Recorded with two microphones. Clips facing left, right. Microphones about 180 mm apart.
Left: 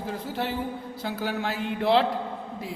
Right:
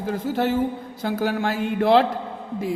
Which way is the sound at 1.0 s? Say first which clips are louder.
Right 6 dB; 50° right (ahead or behind).